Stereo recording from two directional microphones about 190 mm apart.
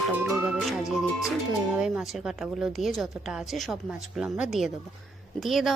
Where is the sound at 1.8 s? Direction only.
5° right (ahead or behind).